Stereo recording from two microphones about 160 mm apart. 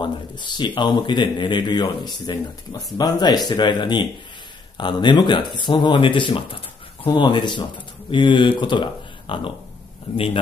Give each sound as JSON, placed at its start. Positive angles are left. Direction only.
{"t": 0.0, "sound": "speech", "side_deg": 30}